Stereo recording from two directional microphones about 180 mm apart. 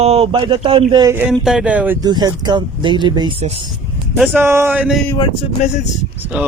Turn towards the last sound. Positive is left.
turn(degrees=-10)  # may be behind; listen again after turning